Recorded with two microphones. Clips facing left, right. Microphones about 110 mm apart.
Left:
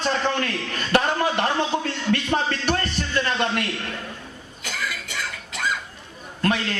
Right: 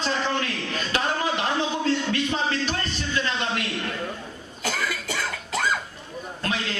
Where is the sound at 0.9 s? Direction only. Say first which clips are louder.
Left 5 dB; 55° left (ahead or behind).